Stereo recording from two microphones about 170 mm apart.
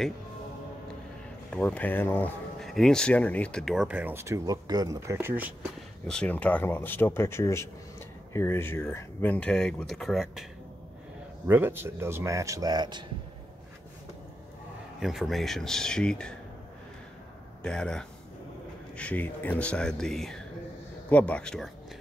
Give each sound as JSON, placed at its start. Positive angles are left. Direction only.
{"t": 1.5, "sound": "speech", "side_deg": 5}
{"t": 5.1, "sound": "speech", "side_deg": -10}
{"t": 6.0, "sound": "speech", "side_deg": 5}
{"t": 11.4, "sound": "speech", "side_deg": -10}
{"t": 15.0, "sound": "speech", "side_deg": 0}
{"t": 17.6, "sound": "speech", "side_deg": 5}